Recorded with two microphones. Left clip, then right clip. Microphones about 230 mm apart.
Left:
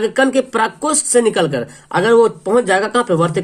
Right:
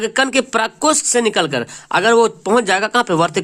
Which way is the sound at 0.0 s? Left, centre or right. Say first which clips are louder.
Left 2 dB; right.